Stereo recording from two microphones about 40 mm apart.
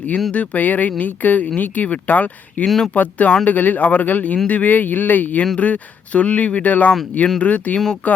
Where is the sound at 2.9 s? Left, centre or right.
Left.